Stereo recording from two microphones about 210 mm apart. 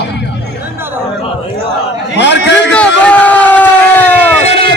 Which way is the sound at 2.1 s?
55° left (ahead or behind).